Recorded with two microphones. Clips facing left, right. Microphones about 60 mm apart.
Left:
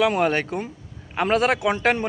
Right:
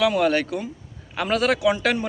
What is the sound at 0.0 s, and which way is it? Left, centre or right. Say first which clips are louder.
A man's voice: even; left.